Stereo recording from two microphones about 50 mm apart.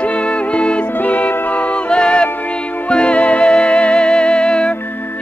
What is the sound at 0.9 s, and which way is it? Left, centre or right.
Music, left.